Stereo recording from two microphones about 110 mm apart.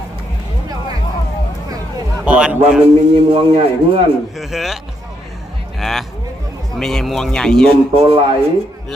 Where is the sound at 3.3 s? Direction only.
55° right (ahead or behind).